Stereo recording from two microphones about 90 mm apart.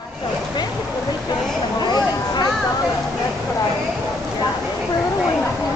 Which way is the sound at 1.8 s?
50° left (ahead or behind).